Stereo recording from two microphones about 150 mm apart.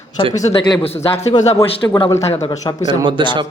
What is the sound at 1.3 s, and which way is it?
Speech, 30° left (ahead or behind).